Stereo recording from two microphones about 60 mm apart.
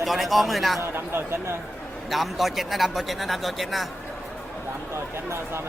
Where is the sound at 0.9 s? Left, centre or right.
Right.